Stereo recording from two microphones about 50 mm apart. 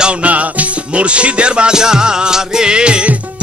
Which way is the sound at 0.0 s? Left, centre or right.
Right.